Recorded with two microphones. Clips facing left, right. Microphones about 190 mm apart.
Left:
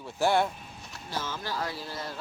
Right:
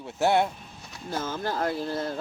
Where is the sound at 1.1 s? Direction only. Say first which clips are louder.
Right 5 dB; 50° right (ahead or behind).